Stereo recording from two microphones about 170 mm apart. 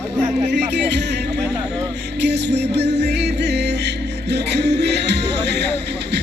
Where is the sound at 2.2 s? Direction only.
90° right.